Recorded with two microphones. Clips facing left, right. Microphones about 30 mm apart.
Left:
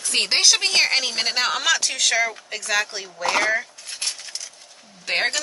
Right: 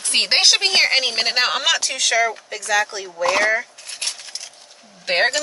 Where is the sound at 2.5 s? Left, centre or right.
Centre.